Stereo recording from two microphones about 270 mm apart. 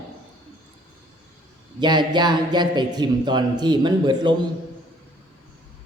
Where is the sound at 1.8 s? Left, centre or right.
Centre.